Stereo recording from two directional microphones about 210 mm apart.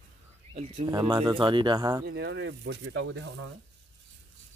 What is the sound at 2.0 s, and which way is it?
Speech, 55° right (ahead or behind).